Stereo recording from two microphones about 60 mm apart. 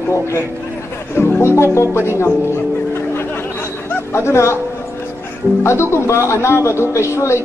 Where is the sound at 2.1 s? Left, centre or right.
Left.